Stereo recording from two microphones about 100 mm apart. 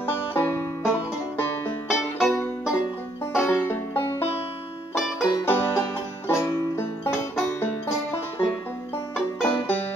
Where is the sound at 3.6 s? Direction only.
25° left (ahead or behind).